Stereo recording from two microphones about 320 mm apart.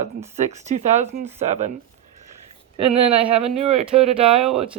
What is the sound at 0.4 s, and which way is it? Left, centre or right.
Speech, right.